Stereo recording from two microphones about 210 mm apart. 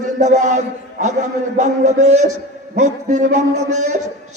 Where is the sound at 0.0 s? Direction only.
35° right (ahead or behind).